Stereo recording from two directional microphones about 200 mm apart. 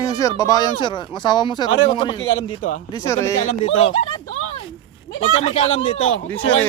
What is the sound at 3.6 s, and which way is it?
A woman's voice, 35° left (ahead or behind).